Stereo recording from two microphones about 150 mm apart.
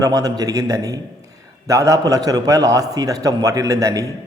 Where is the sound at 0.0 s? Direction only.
25° right (ahead or behind).